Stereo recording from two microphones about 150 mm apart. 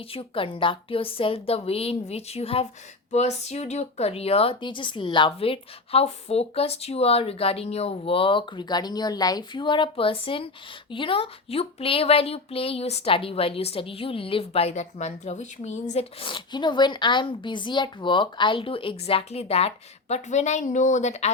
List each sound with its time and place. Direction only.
0.1 s speech: 35° left (ahead or behind)
16.2 s speech: 30° left (ahead or behind); by 21.2 s 50° left (ahead or behind)